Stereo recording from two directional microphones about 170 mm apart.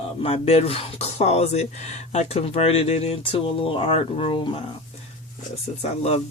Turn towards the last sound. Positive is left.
turn(degrees=40)  # may be behind; listen again after turning